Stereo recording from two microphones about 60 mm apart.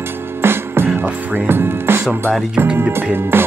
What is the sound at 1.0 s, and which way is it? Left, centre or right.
Music, right.